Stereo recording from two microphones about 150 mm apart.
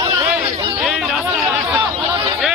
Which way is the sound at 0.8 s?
5° right (ahead or behind).